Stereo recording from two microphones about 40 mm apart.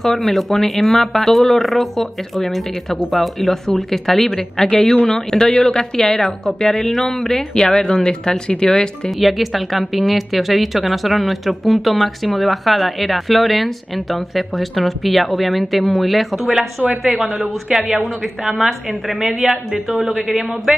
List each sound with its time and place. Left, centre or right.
0.0 s speech: centre
9.2 s speech: centre
16.8 s a woman's voice: right
19.0 s speech: centre